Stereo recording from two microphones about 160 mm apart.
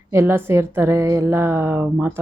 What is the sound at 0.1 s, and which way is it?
Speech, 15° right (ahead or behind).